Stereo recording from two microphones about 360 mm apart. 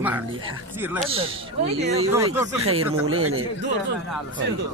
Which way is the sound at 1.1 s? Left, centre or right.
Centre.